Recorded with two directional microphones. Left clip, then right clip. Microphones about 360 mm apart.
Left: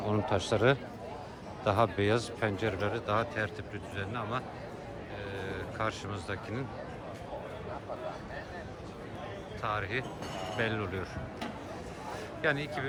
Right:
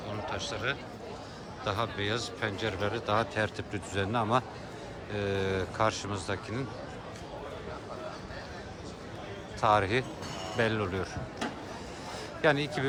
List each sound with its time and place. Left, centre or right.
0.3 s a man's voice: centre
9.6 s a man's voice: centre
12.4 s a man's voice: centre